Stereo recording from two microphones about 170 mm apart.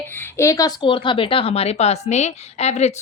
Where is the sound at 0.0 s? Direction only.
10° left (ahead or behind).